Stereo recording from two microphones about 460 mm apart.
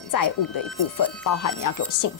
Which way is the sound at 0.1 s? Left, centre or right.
Left.